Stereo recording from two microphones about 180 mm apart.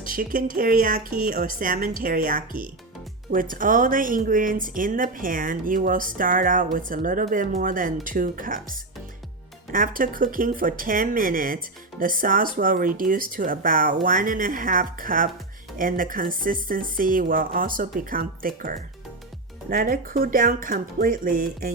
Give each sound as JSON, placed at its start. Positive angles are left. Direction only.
{"t": 0.0, "sound": "speech", "side_deg": -50}